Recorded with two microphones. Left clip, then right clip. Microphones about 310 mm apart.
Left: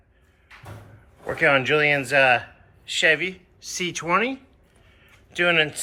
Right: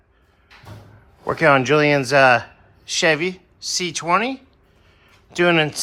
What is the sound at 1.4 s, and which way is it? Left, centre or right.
Speech, centre.